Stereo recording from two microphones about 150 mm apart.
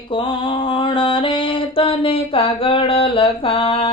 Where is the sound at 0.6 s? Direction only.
35° left (ahead or behind).